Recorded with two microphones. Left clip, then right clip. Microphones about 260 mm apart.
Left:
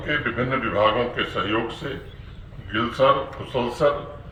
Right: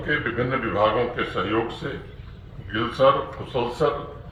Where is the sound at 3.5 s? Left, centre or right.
Left.